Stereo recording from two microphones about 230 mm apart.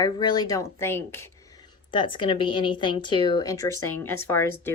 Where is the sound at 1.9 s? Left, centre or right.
Left.